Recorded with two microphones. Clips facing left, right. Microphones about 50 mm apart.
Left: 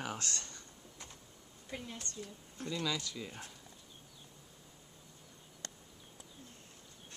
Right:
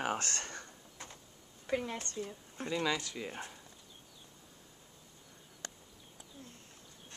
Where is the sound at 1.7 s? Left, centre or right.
Right.